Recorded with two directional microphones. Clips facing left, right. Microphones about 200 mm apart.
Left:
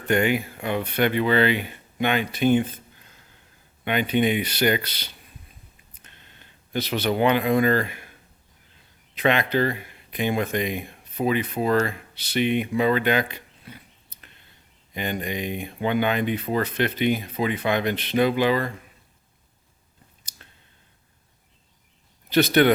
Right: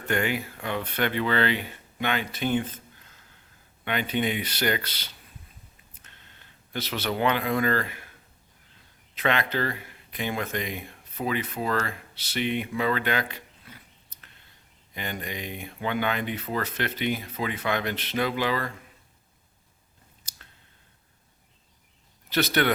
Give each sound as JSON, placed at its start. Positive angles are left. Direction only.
{"t": 0.1, "sound": "speech", "side_deg": 15}
{"t": 3.8, "sound": "speech", "side_deg": 15}
{"t": 6.7, "sound": "speech", "side_deg": 15}
{"t": 9.1, "sound": "speech", "side_deg": 15}
{"t": 14.9, "sound": "speech", "side_deg": 20}
{"t": 22.6, "sound": "speech", "side_deg": 20}